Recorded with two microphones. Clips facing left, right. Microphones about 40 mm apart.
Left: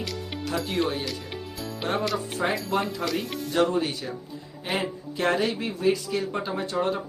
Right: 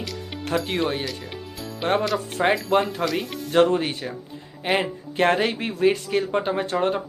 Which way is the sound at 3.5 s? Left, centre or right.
Right.